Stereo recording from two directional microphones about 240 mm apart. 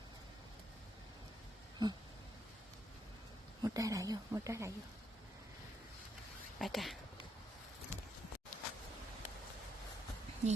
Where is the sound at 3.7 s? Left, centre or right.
Centre.